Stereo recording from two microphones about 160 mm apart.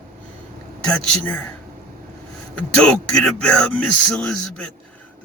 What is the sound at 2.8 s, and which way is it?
Speech, 5° left (ahead or behind).